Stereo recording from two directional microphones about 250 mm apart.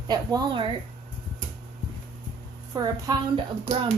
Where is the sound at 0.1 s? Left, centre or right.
Centre.